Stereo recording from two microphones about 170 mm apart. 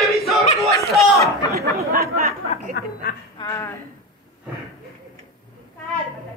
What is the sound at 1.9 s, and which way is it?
Chatter, 60° right (ahead or behind).